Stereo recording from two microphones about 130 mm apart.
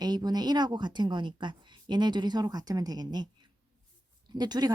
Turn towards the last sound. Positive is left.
turn(degrees=-30)  # may be behind; listen again after turning